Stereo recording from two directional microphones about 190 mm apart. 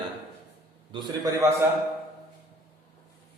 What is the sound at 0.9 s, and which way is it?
Speech, 20° right (ahead or behind).